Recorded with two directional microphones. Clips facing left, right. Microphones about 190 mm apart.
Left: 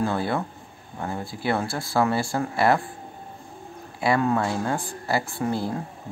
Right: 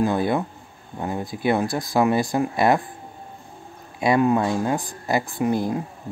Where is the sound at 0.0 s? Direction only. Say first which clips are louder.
Right 4 dB; 15° right (ahead or behind).